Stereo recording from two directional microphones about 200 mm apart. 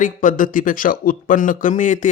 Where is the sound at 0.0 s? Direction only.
40° left (ahead or behind).